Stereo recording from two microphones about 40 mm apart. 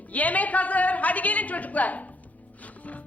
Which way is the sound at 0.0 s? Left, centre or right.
Left.